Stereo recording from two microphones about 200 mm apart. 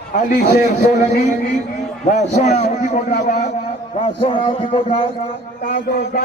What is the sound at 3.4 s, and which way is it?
A man's voice, 30° left (ahead or behind).